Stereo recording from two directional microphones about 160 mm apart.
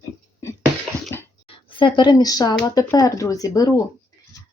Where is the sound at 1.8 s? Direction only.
30° left (ahead or behind).